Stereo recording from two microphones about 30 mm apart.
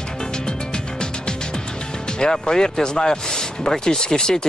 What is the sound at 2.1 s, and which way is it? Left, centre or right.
Speech, left.